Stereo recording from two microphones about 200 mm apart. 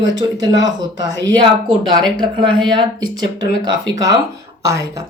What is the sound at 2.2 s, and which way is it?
Speech, 25° right (ahead or behind).